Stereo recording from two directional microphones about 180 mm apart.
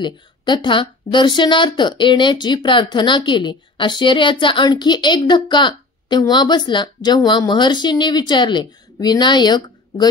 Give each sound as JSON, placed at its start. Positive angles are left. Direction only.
{"t": 0.0, "sound": "a woman's voice", "side_deg": 25}